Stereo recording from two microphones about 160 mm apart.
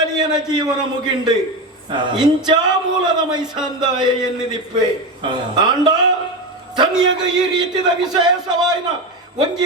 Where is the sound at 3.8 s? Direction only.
30° right (ahead or behind).